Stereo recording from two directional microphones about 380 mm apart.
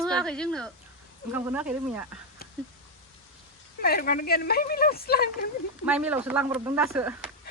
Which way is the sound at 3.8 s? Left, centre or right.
Left.